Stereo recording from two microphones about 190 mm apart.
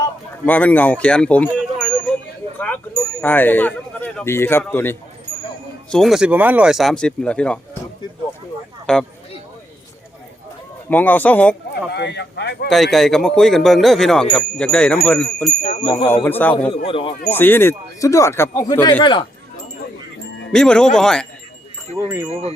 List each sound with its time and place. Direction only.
0.4 s speech: 10° left (ahead or behind)
5.9 s speech: centre (ahead or behind)
8.9 s speech: 5° left (ahead or behind)
10.8 s speech: 10° left (ahead or behind)
11.9 s speech: 65° left (ahead or behind)
12.7 s speech: centre (ahead or behind)
15.6 s speech: 40° left (ahead or behind)
16.0 s speech: 10° left (ahead or behind)
16.8 s speech: 30° left (ahead or behind)
17.2 s speech: 10° left (ahead or behind)
20.5 s speech: 5° left (ahead or behind)